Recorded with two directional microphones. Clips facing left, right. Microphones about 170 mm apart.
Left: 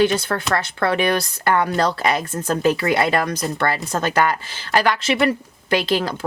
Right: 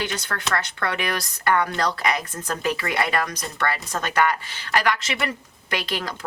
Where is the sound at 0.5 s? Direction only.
30° left (ahead or behind).